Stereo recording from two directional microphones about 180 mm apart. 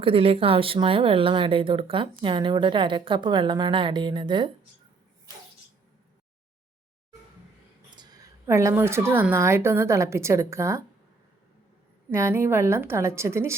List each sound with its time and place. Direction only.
0.0 s speech: 30° right (ahead or behind)
7.9 s a woman's voice: 20° right (ahead or behind)
12.1 s a woman's voice: 15° right (ahead or behind)